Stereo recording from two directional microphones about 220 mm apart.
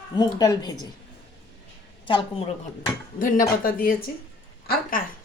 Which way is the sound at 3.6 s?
40° left (ahead or behind).